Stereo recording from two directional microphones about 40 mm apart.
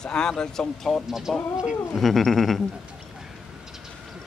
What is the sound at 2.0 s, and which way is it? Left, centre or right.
Speech, centre.